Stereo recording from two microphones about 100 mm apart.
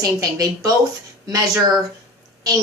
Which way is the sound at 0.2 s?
35° right (ahead or behind).